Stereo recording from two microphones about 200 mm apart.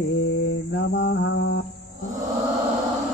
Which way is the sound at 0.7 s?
60° left (ahead or behind).